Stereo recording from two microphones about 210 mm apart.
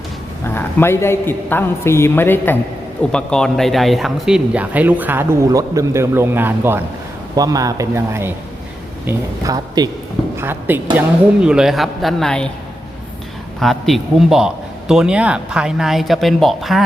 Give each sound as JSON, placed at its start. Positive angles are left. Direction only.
{"t": 0.4, "sound": "a man's voice", "side_deg": 10}
{"t": 13.6, "sound": "a man's voice", "side_deg": 0}